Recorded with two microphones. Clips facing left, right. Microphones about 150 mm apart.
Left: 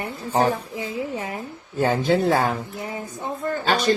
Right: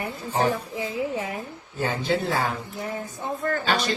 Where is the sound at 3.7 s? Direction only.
45° left (ahead or behind).